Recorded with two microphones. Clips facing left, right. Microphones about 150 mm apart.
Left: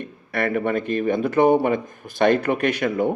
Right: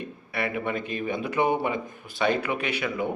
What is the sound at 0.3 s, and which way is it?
Speech, 50° left (ahead or behind).